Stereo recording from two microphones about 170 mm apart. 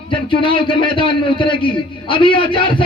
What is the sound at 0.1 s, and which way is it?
A man's voice, 30° left (ahead or behind).